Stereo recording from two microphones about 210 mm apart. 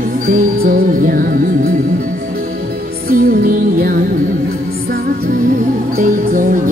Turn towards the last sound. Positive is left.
turn(degrees=-40)  # may be behind; listen again after turning